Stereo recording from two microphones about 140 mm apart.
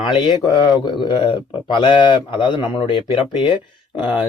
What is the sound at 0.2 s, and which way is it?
Speech, 30° left (ahead or behind).